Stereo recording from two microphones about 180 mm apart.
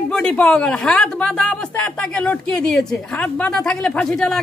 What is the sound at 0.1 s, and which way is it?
Speech, 5° left (ahead or behind).